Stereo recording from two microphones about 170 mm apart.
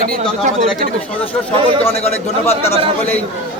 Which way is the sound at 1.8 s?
40° left (ahead or behind).